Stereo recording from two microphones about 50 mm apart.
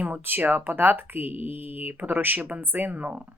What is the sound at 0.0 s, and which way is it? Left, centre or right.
Speech, right.